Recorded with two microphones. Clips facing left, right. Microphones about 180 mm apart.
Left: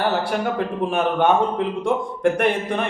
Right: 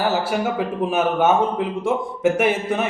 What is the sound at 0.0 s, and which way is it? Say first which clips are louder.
A man's voice: right 1 dB; 5° right (ahead or behind).